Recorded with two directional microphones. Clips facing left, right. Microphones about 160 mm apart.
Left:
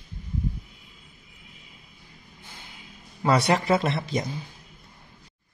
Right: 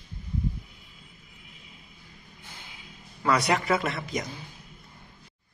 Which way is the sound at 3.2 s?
30° left (ahead or behind).